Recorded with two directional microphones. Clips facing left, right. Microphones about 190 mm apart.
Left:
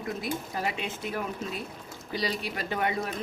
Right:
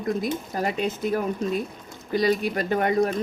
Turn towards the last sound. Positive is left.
turn(degrees=-45)  # may be behind; listen again after turning